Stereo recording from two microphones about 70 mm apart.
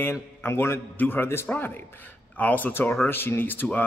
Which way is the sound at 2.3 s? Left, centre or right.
Left.